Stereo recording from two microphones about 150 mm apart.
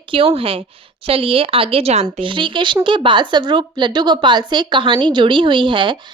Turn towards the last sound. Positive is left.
turn(degrees=-35)  # may be behind; listen again after turning